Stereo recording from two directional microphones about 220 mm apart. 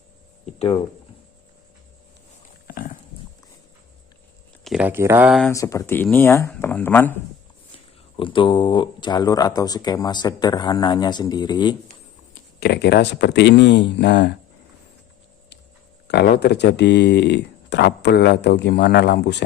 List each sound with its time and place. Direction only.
2.6 s a sound: 40° left (ahead or behind)
4.6 s speech: 5° right (ahead or behind)
5.5 s speech: 15° left (ahead or behind)
8.1 s speech: 25° left (ahead or behind)
12.3 s speech: 45° left (ahead or behind)
16.0 s speech: 45° left (ahead or behind)